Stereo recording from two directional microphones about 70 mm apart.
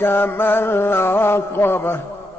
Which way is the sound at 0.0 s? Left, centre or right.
Left.